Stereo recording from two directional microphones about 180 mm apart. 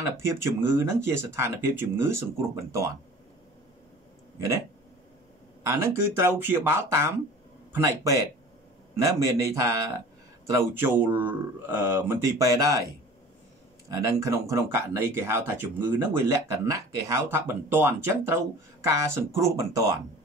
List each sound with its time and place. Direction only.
0.3 s speech: 15° right (ahead or behind)
5.7 s speech: 15° right (ahead or behind)
13.8 s speech: 15° right (ahead or behind)